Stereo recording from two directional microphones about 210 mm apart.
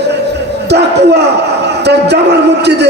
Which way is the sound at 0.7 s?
50° right (ahead or behind).